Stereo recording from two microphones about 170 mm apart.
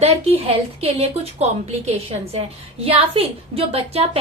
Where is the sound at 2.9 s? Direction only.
35° right (ahead or behind).